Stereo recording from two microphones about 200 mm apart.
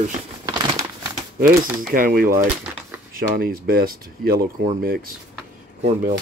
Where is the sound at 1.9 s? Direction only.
45° right (ahead or behind).